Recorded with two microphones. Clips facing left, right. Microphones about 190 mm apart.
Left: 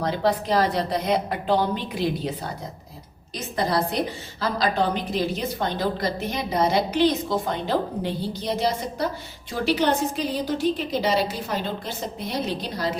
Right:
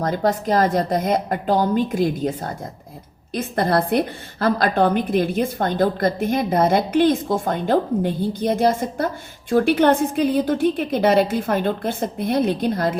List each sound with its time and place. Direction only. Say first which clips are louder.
0.0 s a woman's voice: right 3 dB; 45° right (ahead or behind)